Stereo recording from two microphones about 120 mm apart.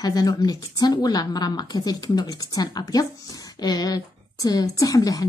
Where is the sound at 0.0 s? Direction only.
35° left (ahead or behind).